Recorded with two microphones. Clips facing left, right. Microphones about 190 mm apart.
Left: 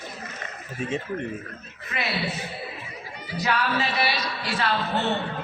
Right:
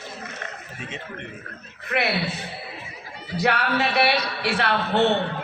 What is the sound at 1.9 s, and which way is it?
Speech, 65° right (ahead or behind).